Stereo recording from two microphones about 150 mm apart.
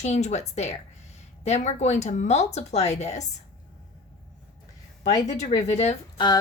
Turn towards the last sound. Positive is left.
turn(degrees=30)  # may be behind; listen again after turning